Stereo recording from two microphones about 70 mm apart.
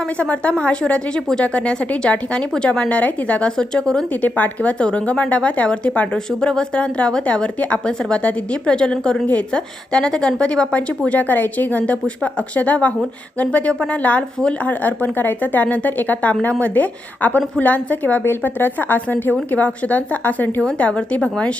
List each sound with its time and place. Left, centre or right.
0.2 s speech: centre